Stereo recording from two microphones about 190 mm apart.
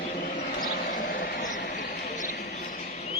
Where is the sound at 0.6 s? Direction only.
50° left (ahead or behind).